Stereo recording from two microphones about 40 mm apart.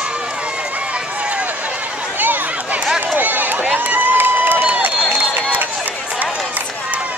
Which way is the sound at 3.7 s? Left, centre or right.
Right.